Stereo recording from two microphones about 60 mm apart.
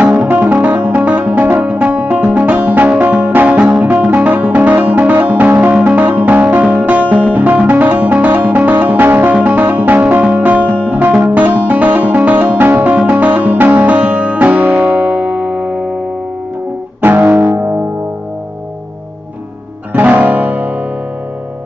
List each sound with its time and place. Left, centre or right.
0.2 s music: right
17.0 s music: right
19.9 s music: right